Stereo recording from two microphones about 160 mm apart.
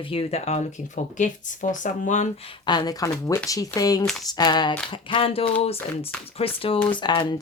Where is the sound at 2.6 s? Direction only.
30° left (ahead or behind).